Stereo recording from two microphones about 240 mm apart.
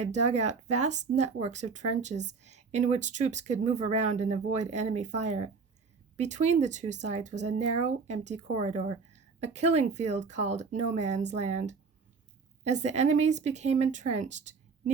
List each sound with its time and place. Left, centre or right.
0.0 s speech: right